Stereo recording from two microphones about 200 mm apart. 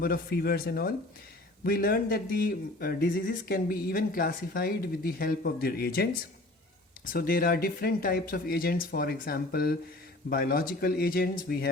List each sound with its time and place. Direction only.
0.0 s speech: 50° left (ahead or behind)